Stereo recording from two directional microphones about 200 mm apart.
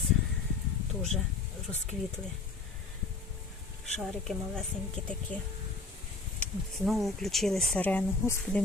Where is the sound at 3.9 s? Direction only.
Centre (ahead or behind).